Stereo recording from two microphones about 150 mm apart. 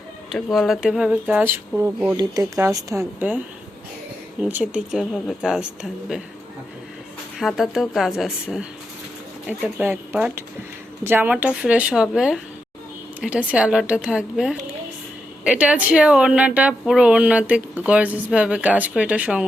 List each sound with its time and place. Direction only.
0.3 s a woman's voice: centre (ahead or behind)
2.1 s a woman's voice: 20° right (ahead or behind); by 6.2 s 5° right (ahead or behind)
7.3 s a woman's voice: centre (ahead or behind)